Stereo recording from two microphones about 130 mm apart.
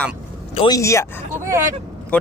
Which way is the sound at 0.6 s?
25° left (ahead or behind).